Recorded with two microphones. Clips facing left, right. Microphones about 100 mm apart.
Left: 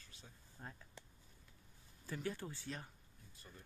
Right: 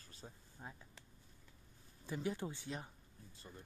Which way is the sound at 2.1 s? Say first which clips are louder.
Right 3 dB; 20° right (ahead or behind).